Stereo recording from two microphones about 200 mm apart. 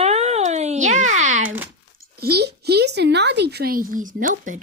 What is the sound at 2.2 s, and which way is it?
A woman's voice, 50° right (ahead or behind).